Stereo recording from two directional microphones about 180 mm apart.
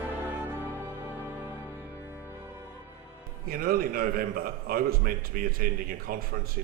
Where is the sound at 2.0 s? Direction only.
10° right (ahead or behind).